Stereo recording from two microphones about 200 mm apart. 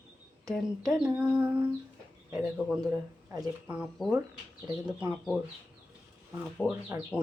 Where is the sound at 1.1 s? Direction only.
10° right (ahead or behind).